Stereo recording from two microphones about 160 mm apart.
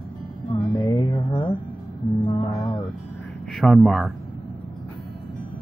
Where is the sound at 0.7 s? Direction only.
25° left (ahead or behind).